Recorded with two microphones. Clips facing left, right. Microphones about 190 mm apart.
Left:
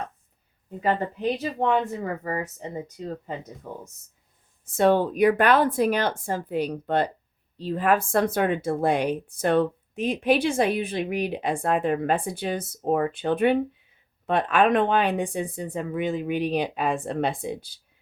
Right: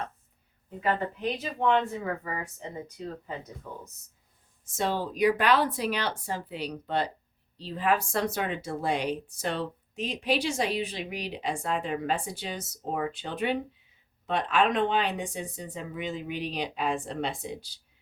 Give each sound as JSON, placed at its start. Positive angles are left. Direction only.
{"t": 1.4, "sound": "speech", "side_deg": 40}
{"t": 3.7, "sound": "speech", "side_deg": 40}
{"t": 4.6, "sound": "speech", "side_deg": 60}